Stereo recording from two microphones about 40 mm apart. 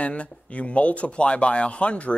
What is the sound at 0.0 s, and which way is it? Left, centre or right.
Speech, left.